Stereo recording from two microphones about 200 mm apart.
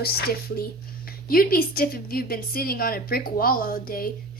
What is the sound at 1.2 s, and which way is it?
A woman's voice, 45° left (ahead or behind).